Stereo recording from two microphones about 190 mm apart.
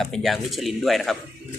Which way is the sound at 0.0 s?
Centre (ahead or behind).